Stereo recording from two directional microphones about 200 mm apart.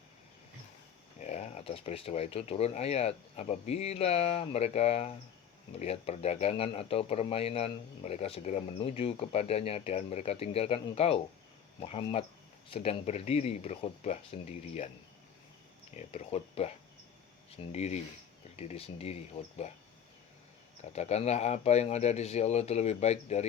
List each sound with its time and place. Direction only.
1.2 s speech: 35° left (ahead or behind)
16.0 s speech: 30° left (ahead or behind)
20.9 s speech: 35° left (ahead or behind)